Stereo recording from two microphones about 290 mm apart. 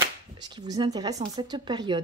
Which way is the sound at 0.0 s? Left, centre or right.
Centre.